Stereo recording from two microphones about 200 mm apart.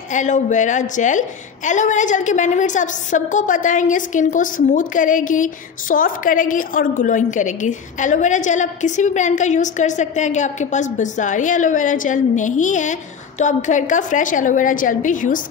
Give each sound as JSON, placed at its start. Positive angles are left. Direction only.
{"t": 0.1, "sound": "a woman's voice", "side_deg": 40}